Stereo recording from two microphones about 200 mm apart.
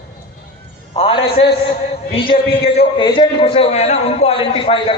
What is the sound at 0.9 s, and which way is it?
Speech, 30° left (ahead or behind).